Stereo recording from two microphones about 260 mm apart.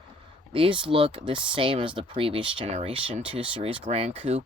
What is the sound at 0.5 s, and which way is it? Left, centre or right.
Speech, centre.